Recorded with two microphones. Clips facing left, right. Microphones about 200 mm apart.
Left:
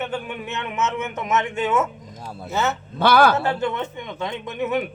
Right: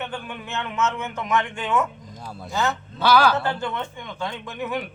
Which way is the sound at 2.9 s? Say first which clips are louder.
Left 2 dB; 55° left (ahead or behind).